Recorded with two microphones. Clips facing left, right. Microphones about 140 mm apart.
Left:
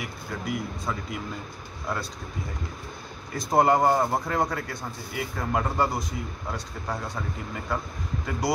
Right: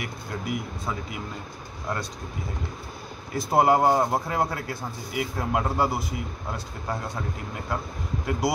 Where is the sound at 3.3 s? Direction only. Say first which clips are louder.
Right 1 dB; 5° right (ahead or behind).